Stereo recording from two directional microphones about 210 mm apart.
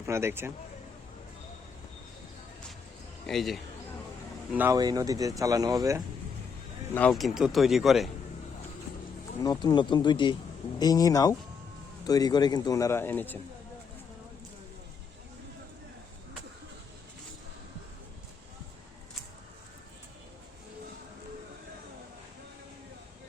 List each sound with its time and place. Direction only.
0.0 s speech: 10° right (ahead or behind)
3.2 s speech: centre (ahead or behind)
4.5 s speech: 15° right (ahead or behind)
6.9 s speech: 5° left (ahead or behind)
9.4 s a man's voice: 20° left (ahead or behind)